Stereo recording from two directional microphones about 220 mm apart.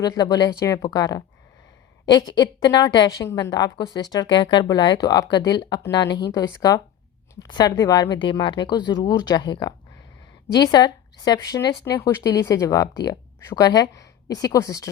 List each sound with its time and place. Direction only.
0.0 s speech: 15° left (ahead or behind)